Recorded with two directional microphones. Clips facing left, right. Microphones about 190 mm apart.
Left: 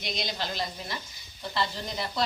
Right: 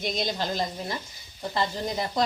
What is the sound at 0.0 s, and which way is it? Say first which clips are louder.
Speech: right 5 dB; 45° right (ahead or behind).